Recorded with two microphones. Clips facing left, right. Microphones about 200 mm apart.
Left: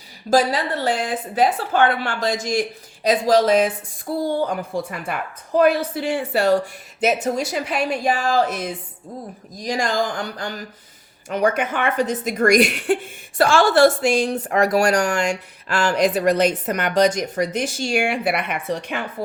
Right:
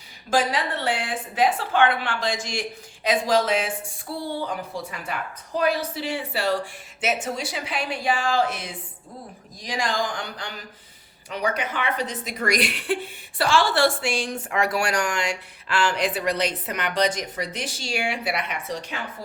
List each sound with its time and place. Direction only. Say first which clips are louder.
0.3 s a woman's voice: left 5 dB; 40° left (ahead or behind); by 19.0 s 60° left (ahead or behind)